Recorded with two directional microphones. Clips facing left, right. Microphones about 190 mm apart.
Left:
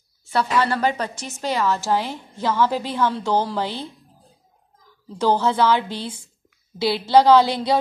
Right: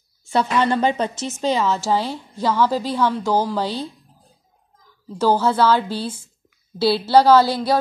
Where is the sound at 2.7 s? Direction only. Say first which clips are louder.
Right 3 dB; 15° left (ahead or behind).